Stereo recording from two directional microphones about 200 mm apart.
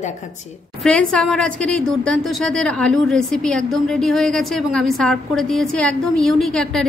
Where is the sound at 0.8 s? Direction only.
5° left (ahead or behind).